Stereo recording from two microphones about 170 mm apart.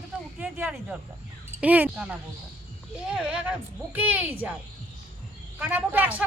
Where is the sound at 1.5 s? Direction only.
10° right (ahead or behind).